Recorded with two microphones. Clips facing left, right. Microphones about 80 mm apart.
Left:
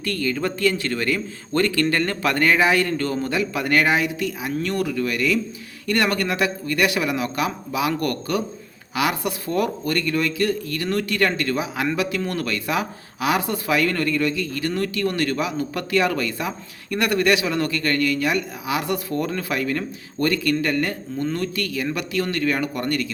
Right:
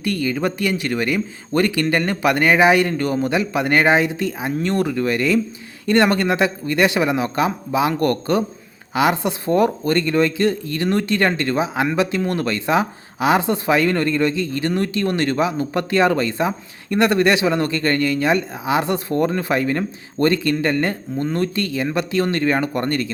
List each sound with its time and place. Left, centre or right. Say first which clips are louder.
0.0 s speech: right 3 dB; centre; by 23.1 s right